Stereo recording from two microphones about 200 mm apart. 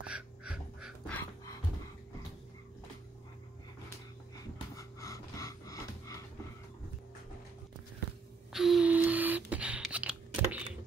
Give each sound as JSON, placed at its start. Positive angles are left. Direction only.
{"t": 0.0, "sound": "music", "side_deg": -5}
{"t": 4.7, "sound": "music", "side_deg": 15}
{"t": 8.5, "sound": "a sound", "side_deg": 0}